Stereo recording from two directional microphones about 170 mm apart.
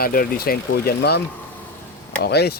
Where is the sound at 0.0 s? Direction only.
60° left (ahead or behind).